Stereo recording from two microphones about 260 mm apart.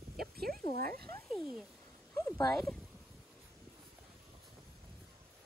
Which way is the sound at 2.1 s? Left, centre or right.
Centre.